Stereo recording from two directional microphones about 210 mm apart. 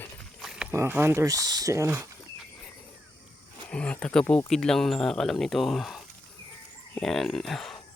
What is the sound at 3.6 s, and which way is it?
Speech, 5° left (ahead or behind).